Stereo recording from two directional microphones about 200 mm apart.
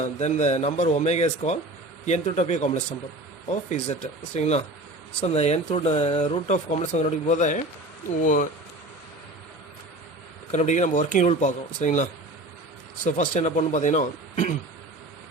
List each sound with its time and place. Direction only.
0.0 s speech: 35° left (ahead or behind)
10.5 s speech: 35° left (ahead or behind)
13.1 s speech: 40° left (ahead or behind)